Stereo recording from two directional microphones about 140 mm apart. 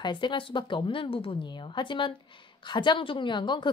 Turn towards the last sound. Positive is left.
turn(degrees=35)  # may be behind; listen again after turning